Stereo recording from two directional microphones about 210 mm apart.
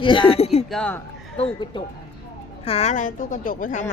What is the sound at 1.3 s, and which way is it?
A woman's voice, 25° left (ahead or behind).